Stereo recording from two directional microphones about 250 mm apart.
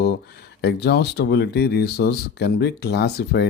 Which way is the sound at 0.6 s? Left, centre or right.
Left.